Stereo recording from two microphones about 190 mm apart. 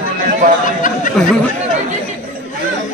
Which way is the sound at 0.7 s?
40° left (ahead or behind).